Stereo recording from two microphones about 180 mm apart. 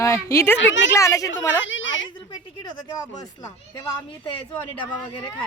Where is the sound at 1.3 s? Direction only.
90° left.